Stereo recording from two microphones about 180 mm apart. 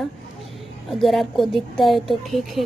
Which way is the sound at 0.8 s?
Centre (ahead or behind).